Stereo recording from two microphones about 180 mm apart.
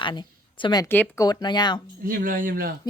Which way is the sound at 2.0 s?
50° right (ahead or behind).